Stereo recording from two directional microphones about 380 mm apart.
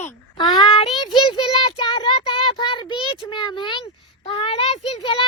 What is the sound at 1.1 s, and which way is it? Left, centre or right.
Child singing, centre.